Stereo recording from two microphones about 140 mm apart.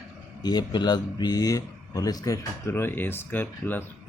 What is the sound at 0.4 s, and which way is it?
Speech, 30° left (ahead or behind).